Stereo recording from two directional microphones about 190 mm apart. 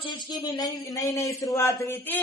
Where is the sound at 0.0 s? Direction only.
25° left (ahead or behind).